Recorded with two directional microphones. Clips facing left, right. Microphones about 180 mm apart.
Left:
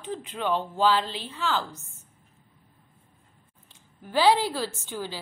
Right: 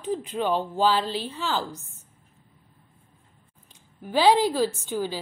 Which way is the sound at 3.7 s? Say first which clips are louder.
Right 2 dB; 15° right (ahead or behind).